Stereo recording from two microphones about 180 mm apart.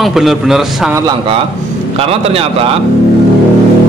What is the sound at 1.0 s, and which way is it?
A man's voice, 25° right (ahead or behind).